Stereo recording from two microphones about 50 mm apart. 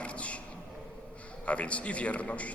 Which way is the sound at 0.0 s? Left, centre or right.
Left.